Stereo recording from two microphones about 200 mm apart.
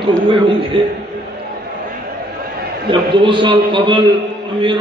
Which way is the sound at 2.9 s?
25° right (ahead or behind).